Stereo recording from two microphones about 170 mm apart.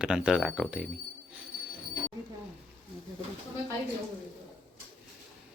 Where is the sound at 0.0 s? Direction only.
5° right (ahead or behind).